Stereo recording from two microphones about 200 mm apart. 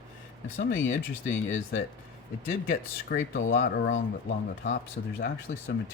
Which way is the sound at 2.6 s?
45° left (ahead or behind).